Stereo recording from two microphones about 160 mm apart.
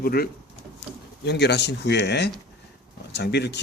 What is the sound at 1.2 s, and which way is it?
Speech, 90° left.